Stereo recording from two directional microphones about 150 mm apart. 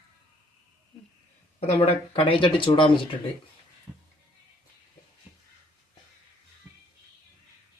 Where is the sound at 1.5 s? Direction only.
40° left (ahead or behind).